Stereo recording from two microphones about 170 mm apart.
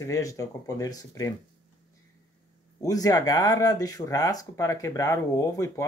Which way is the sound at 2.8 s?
20° left (ahead or behind).